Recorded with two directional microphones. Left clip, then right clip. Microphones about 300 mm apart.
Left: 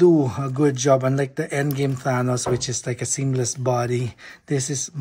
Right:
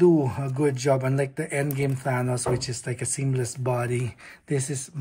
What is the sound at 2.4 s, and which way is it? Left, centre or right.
Speech, left.